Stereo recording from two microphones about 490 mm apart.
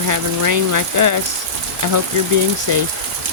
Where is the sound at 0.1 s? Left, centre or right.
Right.